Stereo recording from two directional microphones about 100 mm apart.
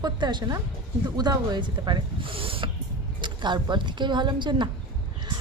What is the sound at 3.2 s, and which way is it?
Speech, 50° right (ahead or behind).